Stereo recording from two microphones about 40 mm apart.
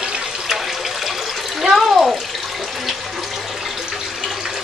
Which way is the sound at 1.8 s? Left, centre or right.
Centre.